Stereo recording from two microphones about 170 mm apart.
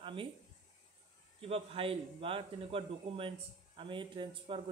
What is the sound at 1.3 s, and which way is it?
A man's voice, 35° right (ahead or behind).